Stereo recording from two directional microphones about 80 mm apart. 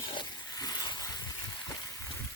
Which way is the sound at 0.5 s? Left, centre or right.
Left.